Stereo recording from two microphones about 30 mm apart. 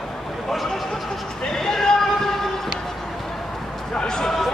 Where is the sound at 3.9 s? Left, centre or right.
Left.